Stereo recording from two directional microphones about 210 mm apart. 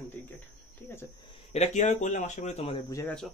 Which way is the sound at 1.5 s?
35° left (ahead or behind).